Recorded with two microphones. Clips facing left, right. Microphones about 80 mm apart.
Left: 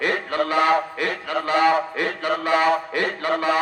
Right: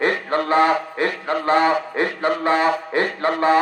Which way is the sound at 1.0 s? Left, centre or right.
Right.